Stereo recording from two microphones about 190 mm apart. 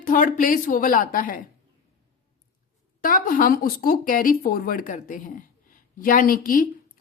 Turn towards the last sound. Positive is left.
turn(degrees=50)  # may be behind; listen again after turning